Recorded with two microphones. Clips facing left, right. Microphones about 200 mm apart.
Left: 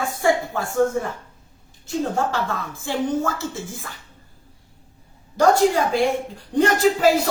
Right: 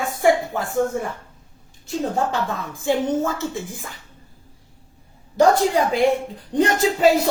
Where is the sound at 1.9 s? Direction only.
20° right (ahead or behind).